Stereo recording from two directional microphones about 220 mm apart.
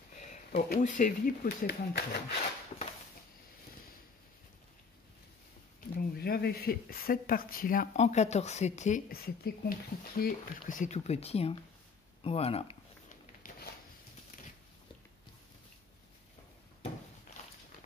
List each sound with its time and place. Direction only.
0.2 s speech: 35° left (ahead or behind)
5.9 s speech: 45° left (ahead or behind); by 11.5 s 25° left (ahead or behind)
12.2 s a sound: 25° left (ahead or behind)